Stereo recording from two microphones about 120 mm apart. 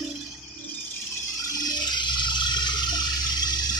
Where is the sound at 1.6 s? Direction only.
40° left (ahead or behind).